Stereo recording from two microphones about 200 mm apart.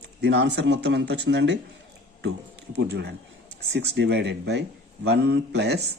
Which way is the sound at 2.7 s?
55° right (ahead or behind).